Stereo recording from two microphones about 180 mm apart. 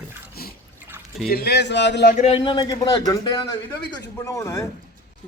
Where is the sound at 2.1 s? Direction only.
30° left (ahead or behind); by 4.6 s 15° left (ahead or behind).